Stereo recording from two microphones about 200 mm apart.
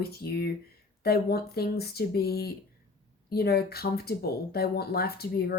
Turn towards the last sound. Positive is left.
turn(degrees=50)  # may be behind; listen again after turning